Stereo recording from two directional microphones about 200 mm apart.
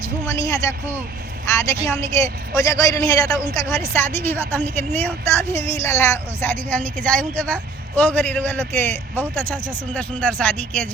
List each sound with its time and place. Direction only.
0.3 s a woman's voice: 15° left (ahead or behind)